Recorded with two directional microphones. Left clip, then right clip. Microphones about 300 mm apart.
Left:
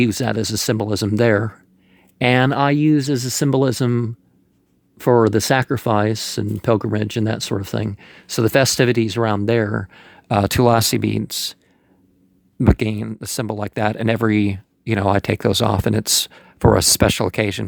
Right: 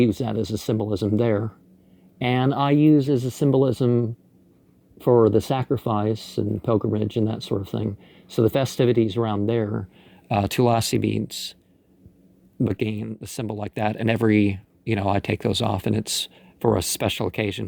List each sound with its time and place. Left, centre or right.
0.1 s speech: left
3.1 s speech: left
3.3 s speech: left
12.6 s speech: centre